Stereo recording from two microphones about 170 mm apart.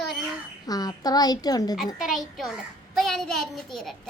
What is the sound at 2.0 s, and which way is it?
Speech, centre (ahead or behind).